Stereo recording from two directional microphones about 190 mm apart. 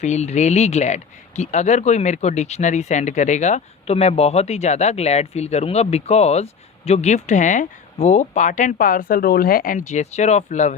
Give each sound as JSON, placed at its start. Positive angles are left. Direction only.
{"t": 0.0, "sound": "speech", "side_deg": 35}